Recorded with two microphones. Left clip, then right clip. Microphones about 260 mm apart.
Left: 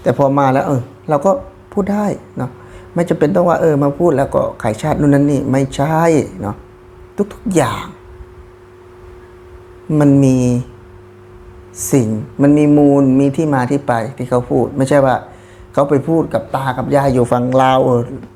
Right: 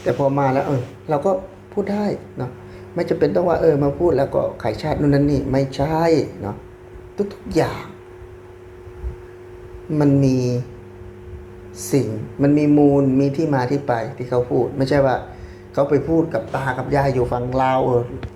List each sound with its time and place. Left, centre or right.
0.0 s speech: left
7.5 s speech: left
11.9 s speech: left